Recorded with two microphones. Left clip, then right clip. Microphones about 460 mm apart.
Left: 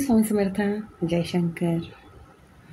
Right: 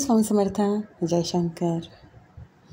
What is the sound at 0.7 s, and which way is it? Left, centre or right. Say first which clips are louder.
Speech: right 2 dB; left.